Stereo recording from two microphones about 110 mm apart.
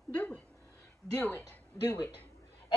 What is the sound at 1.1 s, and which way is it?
Speech, 15° left (ahead or behind).